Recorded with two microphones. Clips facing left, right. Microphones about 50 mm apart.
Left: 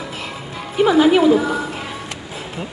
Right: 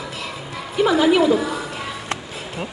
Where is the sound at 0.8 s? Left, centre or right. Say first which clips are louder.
Left 3 dB; left.